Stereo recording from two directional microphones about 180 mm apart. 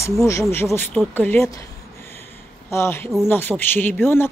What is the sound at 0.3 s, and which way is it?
Speech, 15° left (ahead or behind).